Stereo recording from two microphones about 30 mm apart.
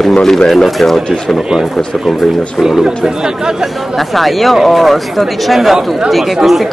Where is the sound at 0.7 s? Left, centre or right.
Centre.